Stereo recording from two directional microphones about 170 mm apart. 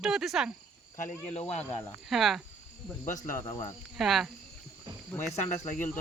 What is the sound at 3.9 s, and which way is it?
Speech, centre (ahead or behind).